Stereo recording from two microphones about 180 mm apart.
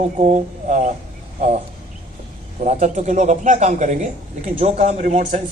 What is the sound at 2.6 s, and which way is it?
A man's voice, 40° right (ahead or behind).